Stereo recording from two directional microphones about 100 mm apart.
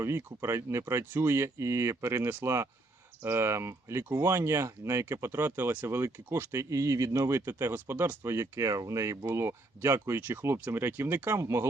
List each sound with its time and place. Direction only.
0.0 s speech: 25° right (ahead or behind)